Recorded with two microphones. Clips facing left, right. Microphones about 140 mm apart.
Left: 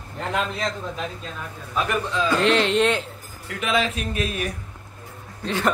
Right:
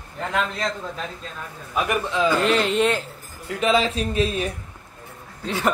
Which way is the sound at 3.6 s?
30° right (ahead or behind).